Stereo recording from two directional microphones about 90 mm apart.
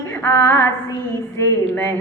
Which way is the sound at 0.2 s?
25° left (ahead or behind).